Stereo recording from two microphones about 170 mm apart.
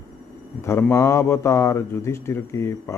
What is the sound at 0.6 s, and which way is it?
Speech, 15° left (ahead or behind).